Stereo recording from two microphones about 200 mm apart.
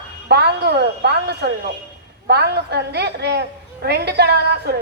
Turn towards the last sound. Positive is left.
turn(degrees=-55)  # may be behind; listen again after turning